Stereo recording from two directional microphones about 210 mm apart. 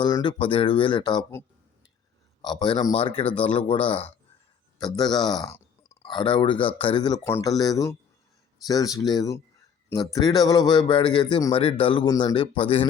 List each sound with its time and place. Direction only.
0.0 s speech: 20° left (ahead or behind)